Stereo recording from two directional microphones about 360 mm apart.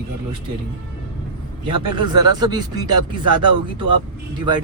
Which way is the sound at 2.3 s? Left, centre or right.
Centre.